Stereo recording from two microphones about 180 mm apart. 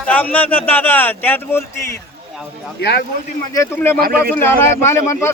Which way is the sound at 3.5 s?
15° left (ahead or behind).